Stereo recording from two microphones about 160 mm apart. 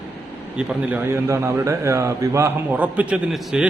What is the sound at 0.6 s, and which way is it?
A man's voice, 10° right (ahead or behind).